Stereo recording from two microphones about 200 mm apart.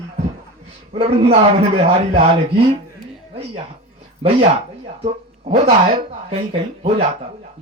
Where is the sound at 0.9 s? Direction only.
30° right (ahead or behind).